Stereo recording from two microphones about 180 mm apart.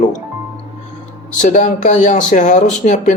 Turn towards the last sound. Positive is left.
turn(degrees=45)  # may be behind; listen again after turning